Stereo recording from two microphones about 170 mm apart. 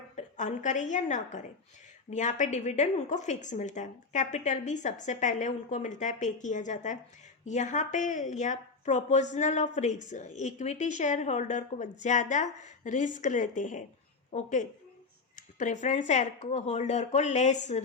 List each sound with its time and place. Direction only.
0.2 s a woman's voice: 45° left (ahead or behind)